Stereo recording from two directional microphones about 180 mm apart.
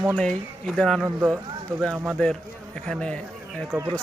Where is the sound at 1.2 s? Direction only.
15° right (ahead or behind).